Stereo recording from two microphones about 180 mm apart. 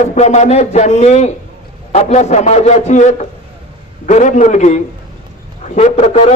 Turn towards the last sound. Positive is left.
turn(degrees=40)  # may be behind; listen again after turning